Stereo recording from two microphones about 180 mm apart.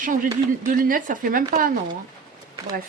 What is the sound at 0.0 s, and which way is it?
Speech, 45° right (ahead or behind).